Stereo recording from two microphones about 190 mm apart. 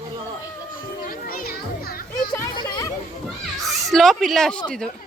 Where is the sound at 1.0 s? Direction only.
50° left (ahead or behind).